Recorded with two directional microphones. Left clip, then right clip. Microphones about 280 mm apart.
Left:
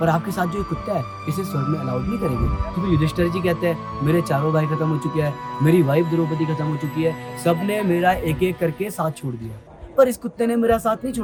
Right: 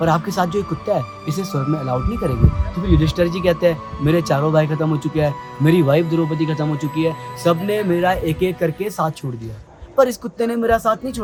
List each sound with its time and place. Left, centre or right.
0.0 s speech: centre
2.8 s speech: centre